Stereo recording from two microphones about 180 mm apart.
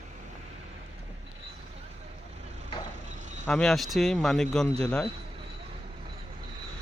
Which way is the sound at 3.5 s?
5° left (ahead or behind).